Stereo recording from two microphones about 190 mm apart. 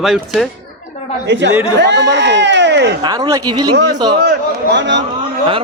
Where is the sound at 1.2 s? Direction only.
70° right (ahead or behind).